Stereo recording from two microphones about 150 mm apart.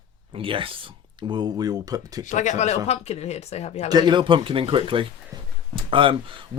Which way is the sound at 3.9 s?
30° right (ahead or behind).